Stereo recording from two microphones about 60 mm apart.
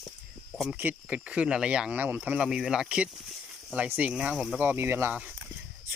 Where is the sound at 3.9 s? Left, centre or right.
Right.